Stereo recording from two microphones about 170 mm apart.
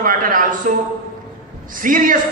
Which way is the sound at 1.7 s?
50° right (ahead or behind).